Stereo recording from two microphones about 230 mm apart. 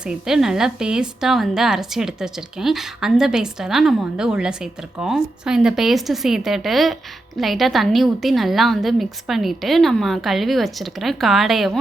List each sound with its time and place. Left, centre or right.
0.0 s a woman's voice: centre